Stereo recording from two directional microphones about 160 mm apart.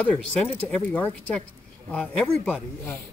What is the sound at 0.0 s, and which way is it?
Speech, 5° left (ahead or behind).